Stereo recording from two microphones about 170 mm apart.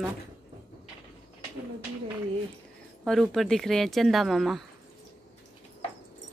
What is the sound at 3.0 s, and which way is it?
Speech, centre (ahead or behind).